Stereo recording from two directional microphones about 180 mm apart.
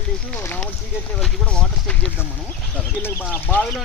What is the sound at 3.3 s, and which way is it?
Speech, 10° left (ahead or behind).